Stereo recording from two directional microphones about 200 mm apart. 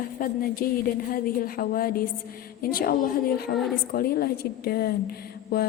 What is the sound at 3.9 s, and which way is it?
A woman's voice, 50° left (ahead or behind).